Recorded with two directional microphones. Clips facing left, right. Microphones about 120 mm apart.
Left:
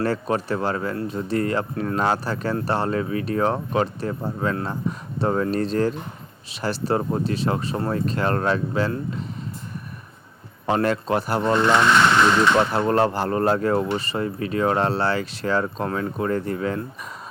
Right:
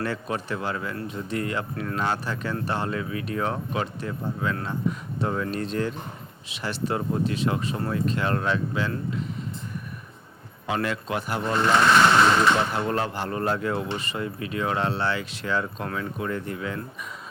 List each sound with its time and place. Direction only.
0.0 s speech: 40° left (ahead or behind)
10.7 s speech: 40° left (ahead or behind)
12.5 s speech: 45° left (ahead or behind)